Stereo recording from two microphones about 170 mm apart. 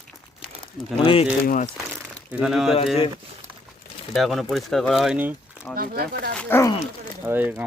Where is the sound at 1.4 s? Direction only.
50° left (ahead or behind).